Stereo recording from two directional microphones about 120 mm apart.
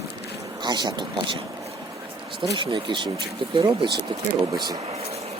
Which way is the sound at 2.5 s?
45° right (ahead or behind).